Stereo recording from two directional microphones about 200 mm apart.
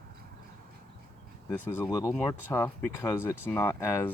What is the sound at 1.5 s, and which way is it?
Speech, 10° left (ahead or behind).